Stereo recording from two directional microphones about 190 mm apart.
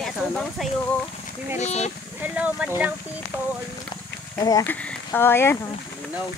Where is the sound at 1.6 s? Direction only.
35° left (ahead or behind).